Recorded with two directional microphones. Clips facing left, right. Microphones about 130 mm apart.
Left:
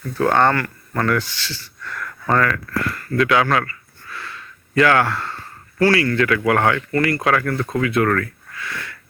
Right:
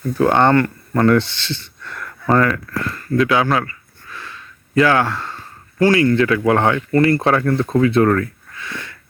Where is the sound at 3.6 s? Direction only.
15° right (ahead or behind).